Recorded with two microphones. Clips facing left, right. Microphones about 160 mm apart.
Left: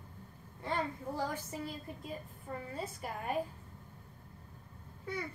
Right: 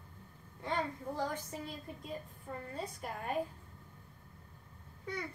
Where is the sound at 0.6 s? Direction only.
5° left (ahead or behind).